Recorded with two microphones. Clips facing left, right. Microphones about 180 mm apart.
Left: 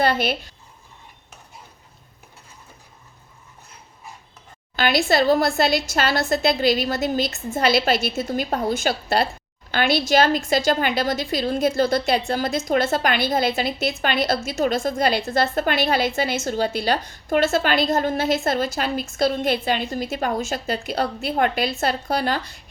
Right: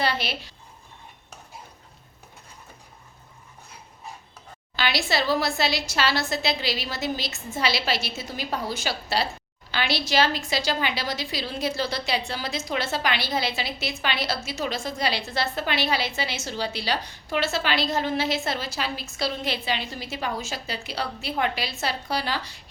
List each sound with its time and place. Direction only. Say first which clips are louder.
0.0 s a woman's voice: left 6 dB; 50° left (ahead or behind)
4.8 s a woman's voice: left 7 dB; 50° left (ahead or behind)